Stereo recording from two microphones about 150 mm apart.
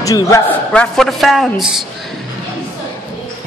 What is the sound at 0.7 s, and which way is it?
A man's voice, 5° left (ahead or behind).